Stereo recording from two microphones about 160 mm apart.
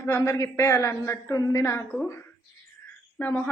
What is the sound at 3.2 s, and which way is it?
Speech, 10° left (ahead or behind).